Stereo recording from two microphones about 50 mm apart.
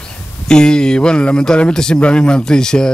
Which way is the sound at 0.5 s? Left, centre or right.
Centre.